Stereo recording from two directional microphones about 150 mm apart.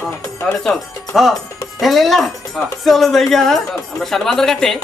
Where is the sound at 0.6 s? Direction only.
Centre (ahead or behind).